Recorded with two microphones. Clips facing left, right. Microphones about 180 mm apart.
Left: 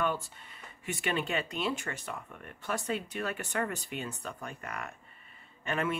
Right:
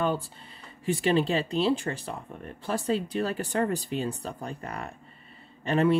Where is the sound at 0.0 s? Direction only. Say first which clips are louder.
Right 4 dB; 30° right (ahead or behind).